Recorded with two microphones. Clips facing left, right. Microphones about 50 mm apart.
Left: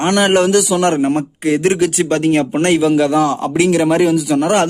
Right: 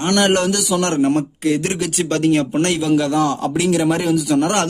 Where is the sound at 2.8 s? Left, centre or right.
Centre.